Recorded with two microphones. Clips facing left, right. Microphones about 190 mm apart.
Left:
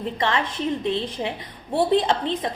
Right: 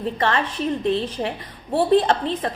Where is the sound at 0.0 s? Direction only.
20° left (ahead or behind).